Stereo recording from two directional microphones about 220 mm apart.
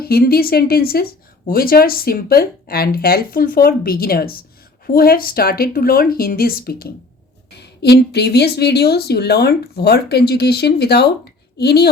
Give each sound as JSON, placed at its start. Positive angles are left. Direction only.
{"t": 0.0, "sound": "speech", "side_deg": 45}